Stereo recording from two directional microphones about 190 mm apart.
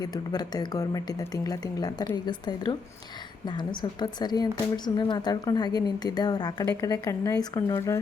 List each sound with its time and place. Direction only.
0.0 s speech: 20° left (ahead or behind)